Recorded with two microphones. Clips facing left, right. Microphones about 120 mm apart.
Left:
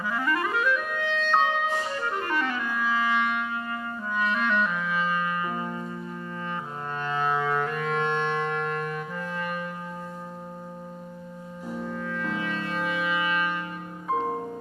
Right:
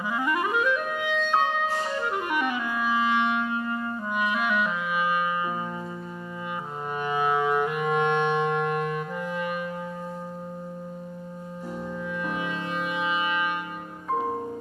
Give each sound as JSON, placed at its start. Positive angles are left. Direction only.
{"t": 0.0, "sound": "clarinet", "side_deg": -15}
{"t": 7.0, "sound": "music", "side_deg": -15}
{"t": 11.9, "sound": "music", "side_deg": -15}